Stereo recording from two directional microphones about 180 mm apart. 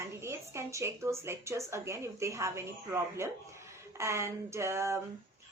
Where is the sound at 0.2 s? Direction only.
15° right (ahead or behind).